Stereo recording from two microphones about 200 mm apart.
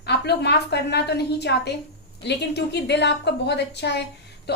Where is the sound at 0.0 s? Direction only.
55° left (ahead or behind).